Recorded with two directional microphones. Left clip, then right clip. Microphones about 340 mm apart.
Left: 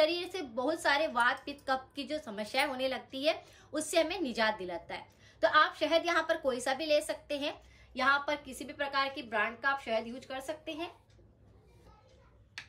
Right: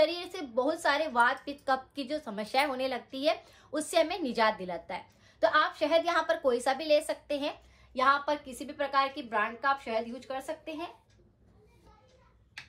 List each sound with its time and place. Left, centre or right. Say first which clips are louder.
0.0 s a woman's voice: right 2 dB; centre